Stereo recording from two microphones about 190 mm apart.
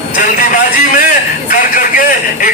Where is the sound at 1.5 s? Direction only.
45° left (ahead or behind).